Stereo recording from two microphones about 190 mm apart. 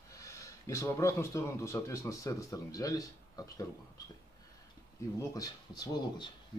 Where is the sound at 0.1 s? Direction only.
15° left (ahead or behind).